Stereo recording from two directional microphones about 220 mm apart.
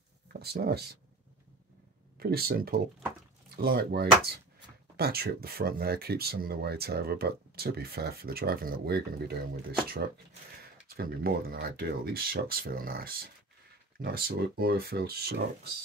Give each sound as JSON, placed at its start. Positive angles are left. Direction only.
{"t": 0.3, "sound": "speech", "side_deg": -45}
{"t": 2.1, "sound": "speech", "side_deg": -45}
{"t": 11.0, "sound": "speech", "side_deg": -40}